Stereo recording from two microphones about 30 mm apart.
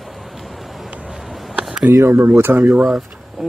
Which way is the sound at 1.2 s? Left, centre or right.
Centre.